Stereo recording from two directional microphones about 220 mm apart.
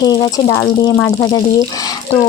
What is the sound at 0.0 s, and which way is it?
Speech, 15° left (ahead or behind).